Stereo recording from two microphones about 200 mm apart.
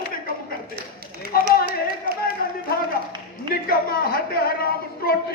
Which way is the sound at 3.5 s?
45° left (ahead or behind).